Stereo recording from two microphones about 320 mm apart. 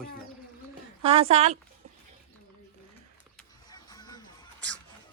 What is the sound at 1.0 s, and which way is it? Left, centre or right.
Speech, centre.